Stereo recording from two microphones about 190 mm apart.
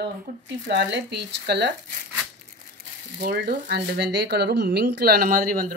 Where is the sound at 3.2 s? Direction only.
55° right (ahead or behind).